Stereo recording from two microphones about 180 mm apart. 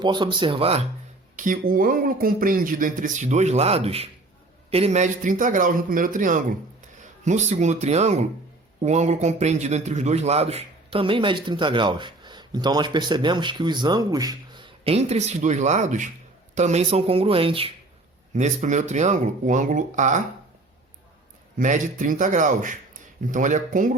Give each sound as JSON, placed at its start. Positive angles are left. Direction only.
{"t": 0.0, "sound": "a man's voice", "side_deg": -25}
{"t": 1.4, "sound": "a man's voice", "side_deg": -50}
{"t": 21.6, "sound": "speech", "side_deg": -45}